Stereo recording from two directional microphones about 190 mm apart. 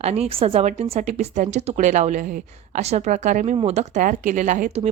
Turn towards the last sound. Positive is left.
turn(degrees=-40)  # may be behind; listen again after turning